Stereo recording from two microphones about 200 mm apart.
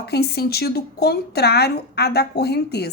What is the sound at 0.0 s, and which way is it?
A woman's voice, 55° left (ahead or behind).